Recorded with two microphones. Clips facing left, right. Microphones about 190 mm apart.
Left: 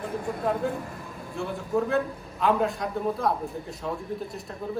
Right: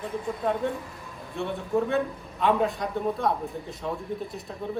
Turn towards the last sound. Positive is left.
turn(degrees=0)  # may be behind; listen again after turning